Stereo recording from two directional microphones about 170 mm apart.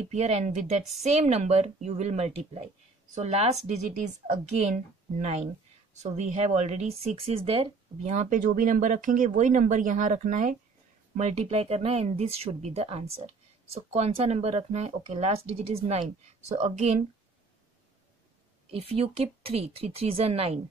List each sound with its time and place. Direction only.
0.0 s speech: 40° right (ahead or behind)
8.0 s speech: 45° right (ahead or behind)
18.7 s speech: 35° right (ahead or behind)